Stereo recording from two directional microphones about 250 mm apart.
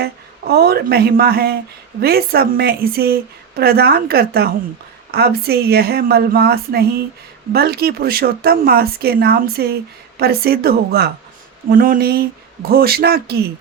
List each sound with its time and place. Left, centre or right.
0.0 s a woman's voice: right